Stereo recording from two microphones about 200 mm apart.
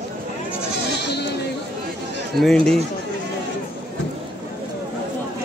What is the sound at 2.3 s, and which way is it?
Speech, centre (ahead or behind).